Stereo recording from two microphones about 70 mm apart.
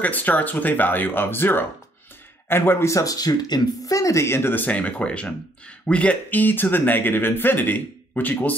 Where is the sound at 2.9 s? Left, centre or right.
Left.